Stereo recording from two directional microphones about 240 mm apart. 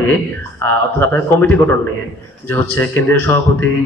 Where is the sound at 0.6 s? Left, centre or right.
Centre.